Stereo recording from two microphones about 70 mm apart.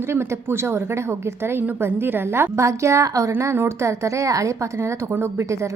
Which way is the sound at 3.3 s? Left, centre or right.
Right.